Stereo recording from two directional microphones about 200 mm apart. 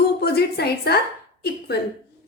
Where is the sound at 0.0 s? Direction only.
55° left (ahead or behind).